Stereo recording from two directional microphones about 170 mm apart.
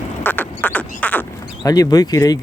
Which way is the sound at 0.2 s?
10° left (ahead or behind).